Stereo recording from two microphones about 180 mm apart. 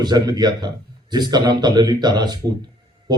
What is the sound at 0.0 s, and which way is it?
Speech, 25° right (ahead or behind).